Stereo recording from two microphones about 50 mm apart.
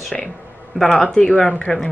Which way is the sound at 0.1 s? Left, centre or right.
Centre.